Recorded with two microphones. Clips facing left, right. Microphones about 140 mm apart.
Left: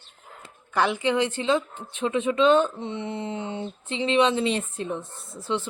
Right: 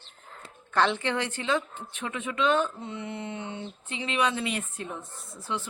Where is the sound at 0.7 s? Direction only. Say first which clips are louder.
Left 3 dB; 10° left (ahead or behind).